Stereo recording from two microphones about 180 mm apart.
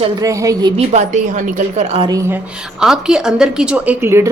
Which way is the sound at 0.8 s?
45° right (ahead or behind).